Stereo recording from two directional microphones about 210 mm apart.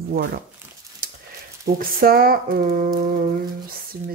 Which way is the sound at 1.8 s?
45° right (ahead or behind).